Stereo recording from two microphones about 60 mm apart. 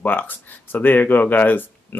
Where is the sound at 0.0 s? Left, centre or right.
Left.